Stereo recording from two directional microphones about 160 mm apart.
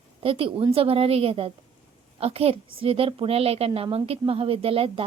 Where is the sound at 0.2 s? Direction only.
35° right (ahead or behind).